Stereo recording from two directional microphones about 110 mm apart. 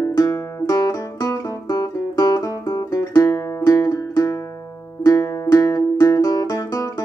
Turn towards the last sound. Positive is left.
turn(degrees=35)  # may be behind; listen again after turning